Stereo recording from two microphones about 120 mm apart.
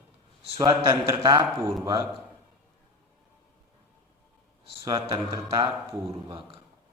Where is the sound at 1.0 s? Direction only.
35° right (ahead or behind).